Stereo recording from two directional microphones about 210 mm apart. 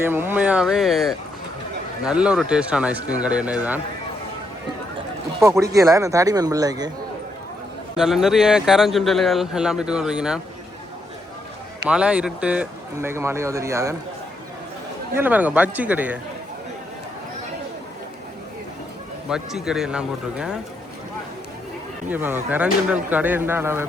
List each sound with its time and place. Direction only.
0.0 s speech: 10° right (ahead or behind)
5.4 s speech: 15° right (ahead or behind)
7.9 s speech: centre (ahead or behind)
11.9 s speech: 5° right (ahead or behind)
15.1 s speech: 10° right (ahead or behind)
19.3 s speech: centre (ahead or behind)
22.1 s speech: 10° right (ahead or behind)